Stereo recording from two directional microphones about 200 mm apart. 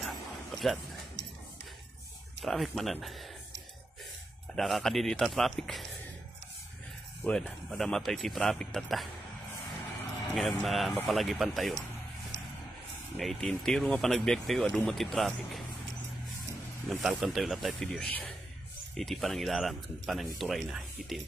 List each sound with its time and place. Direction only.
0.0 s dog: centre (ahead or behind)
2.4 s speech: centre (ahead or behind)
4.6 s speech: centre (ahead or behind)
7.2 s speech: 5° left (ahead or behind)
10.3 s speech: centre (ahead or behind)
12.3 s vehicle: 60° right (ahead or behind)
13.2 s speech: centre (ahead or behind)
16.9 s speech: centre (ahead or behind)